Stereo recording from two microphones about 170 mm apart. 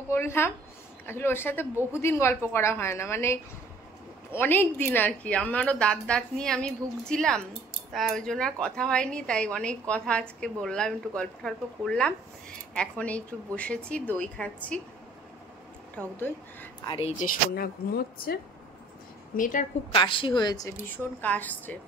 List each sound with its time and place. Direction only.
0.1 s a woman's voice: 15° left (ahead or behind)
16.8 s speech: 30° left (ahead or behind)
17.2 s speech: 60° left (ahead or behind)
19.3 s a woman's voice: 50° left (ahead or behind)
19.9 s a woman's voice: 30° left (ahead or behind)
20.8 s a woman's voice: 10° left (ahead or behind)